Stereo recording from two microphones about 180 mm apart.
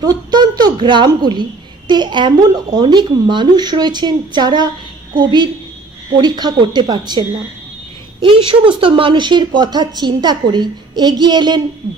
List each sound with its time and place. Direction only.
0.0 s speech: 20° right (ahead or behind)